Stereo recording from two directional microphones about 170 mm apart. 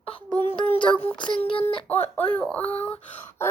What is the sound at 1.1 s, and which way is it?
Child singing, 30° left (ahead or behind).